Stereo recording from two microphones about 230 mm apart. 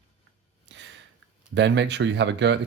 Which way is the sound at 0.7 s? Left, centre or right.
Right.